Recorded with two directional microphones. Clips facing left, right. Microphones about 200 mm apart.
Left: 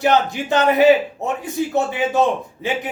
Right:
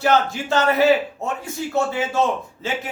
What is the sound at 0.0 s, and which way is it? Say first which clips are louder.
A man's voice: left 2 dB; 15° left (ahead or behind).